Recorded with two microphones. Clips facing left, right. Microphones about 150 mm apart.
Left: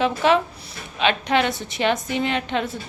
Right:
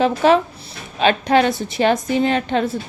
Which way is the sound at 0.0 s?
40° right (ahead or behind).